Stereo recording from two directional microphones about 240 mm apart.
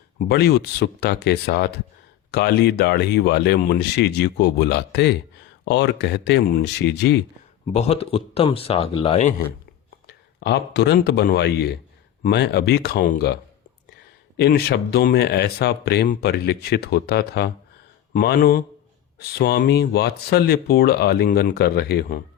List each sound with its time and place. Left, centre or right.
0.2 s speech: left
7.7 s speech: left
10.4 s speech: left